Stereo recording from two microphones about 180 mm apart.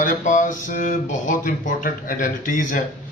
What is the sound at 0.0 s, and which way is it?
Speech, 45° left (ahead or behind).